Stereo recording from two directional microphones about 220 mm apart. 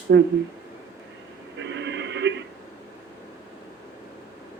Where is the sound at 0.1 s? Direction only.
55° right (ahead or behind).